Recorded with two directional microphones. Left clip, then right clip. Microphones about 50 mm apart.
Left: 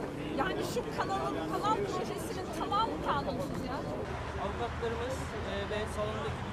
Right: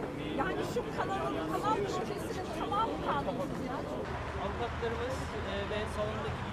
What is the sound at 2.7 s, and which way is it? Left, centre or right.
Speech, left.